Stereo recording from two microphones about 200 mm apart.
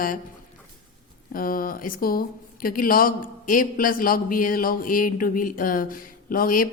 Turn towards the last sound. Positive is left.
turn(degrees=45)  # may be behind; listen again after turning